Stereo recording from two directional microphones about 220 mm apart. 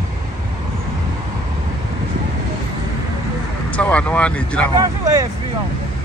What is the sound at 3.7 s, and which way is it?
Speech, 5° left (ahead or behind).